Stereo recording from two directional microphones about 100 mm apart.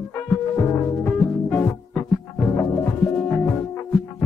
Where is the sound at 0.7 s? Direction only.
20° left (ahead or behind).